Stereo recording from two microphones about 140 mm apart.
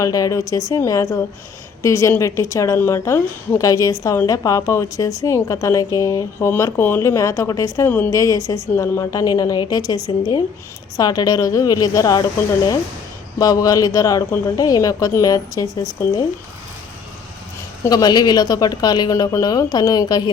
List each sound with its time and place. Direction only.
0.0 s a woman's voice: 25° left (ahead or behind)
13.4 s a woman's voice: 25° left (ahead or behind)
17.8 s a woman's voice: 25° left (ahead or behind)